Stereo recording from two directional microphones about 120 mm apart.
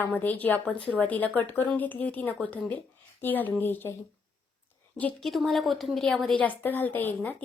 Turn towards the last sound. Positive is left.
turn(degrees=15)  # may be behind; listen again after turning